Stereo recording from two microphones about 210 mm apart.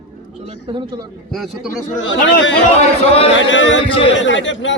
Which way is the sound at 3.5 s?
60° left (ahead or behind).